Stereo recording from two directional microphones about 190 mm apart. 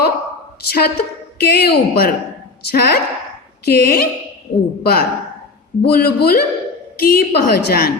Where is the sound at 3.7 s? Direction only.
55° left (ahead or behind).